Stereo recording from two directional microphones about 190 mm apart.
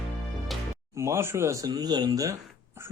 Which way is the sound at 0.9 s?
15° right (ahead or behind).